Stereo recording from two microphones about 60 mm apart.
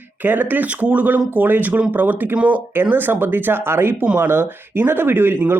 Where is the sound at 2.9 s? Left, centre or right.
Right.